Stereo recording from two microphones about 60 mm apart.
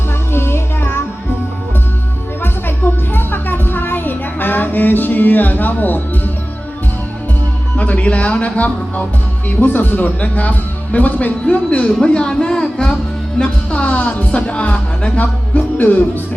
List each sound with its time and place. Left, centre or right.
0.3 s music: left
2.4 s music: left
7.8 s a man's voice: left